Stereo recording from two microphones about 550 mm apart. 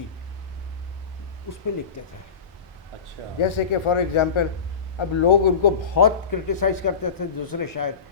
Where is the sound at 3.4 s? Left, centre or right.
Left.